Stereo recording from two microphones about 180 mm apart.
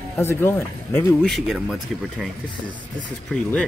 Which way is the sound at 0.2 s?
15° left (ahead or behind).